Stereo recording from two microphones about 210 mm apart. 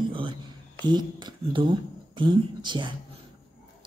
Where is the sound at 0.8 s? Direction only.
20° right (ahead or behind).